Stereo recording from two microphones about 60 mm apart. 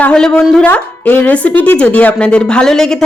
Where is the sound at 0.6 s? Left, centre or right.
Left.